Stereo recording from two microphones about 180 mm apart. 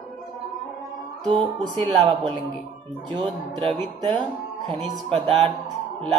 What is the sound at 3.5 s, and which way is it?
Music, 25° right (ahead or behind).